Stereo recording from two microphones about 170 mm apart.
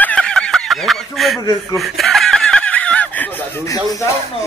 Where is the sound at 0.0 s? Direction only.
5° left (ahead or behind).